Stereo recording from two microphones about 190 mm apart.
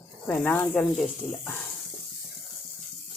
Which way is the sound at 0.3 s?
10° left (ahead or behind).